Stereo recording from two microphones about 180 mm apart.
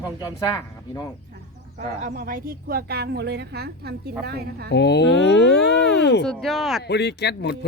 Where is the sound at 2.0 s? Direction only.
50° right (ahead or behind).